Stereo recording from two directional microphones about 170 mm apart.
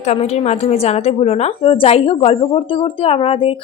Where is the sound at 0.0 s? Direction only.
40° left (ahead or behind).